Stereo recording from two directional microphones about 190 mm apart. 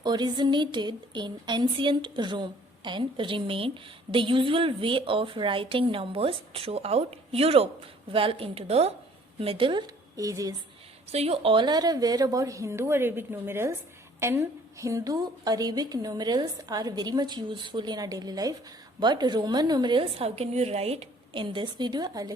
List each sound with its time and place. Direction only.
0.0 s a woman's voice: 25° right (ahead or behind)
11.1 s a woman's voice: 30° right (ahead or behind)